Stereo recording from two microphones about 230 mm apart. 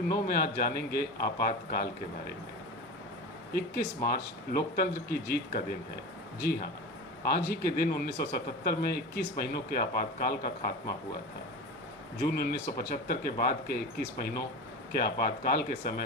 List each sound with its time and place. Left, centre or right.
0.1 s speech: left
3.5 s speech: left
12.2 s speech: left